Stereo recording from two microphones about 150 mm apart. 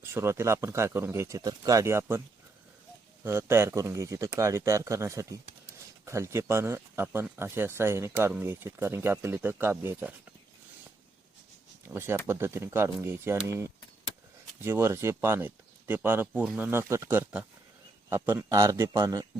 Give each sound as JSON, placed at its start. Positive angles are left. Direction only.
{"t": 0.0, "sound": "speech", "side_deg": -15}
{"t": 3.2, "sound": "speech", "side_deg": -15}
{"t": 12.3, "sound": "speech", "side_deg": -15}